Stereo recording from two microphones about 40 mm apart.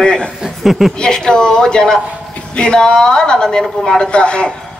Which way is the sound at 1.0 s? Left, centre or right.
Centre.